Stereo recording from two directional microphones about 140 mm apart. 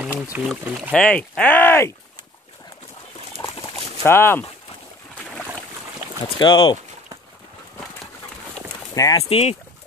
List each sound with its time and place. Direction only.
0.0 s speech: 10° right (ahead or behind)
0.9 s speech: 10° left (ahead or behind)
3.6 s boat: 20° left (ahead or behind)
5.1 s boat: 5° left (ahead or behind)
6.2 s speech: 35° left (ahead or behind)
8.9 s speech: 25° left (ahead or behind)
9.2 s speech: 45° left (ahead or behind)